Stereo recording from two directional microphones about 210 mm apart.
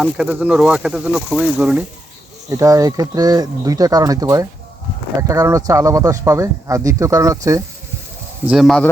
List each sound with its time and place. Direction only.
0.0 s speech: 5° right (ahead or behind)
2.5 s speech: 15° right (ahead or behind)
8.4 s speech: centre (ahead or behind)